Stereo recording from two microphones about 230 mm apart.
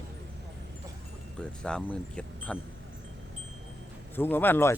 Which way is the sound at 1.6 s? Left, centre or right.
Centre.